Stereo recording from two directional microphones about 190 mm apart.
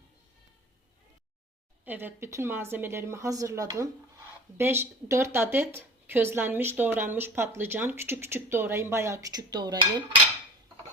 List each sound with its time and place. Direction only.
1.8 s speech: 10° right (ahead or behind)